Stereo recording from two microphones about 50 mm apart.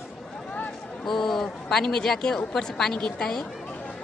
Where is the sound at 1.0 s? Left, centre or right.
Centre.